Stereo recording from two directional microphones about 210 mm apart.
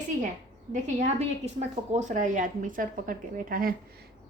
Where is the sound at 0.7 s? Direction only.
35° right (ahead or behind).